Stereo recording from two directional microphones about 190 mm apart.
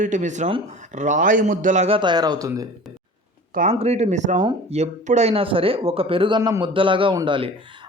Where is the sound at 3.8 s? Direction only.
35° right (ahead or behind).